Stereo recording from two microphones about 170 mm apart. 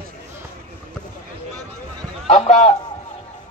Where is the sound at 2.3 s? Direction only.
35° left (ahead or behind).